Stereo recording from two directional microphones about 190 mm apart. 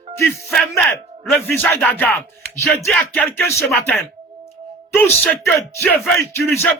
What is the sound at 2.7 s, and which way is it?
A man's voice, centre (ahead or behind).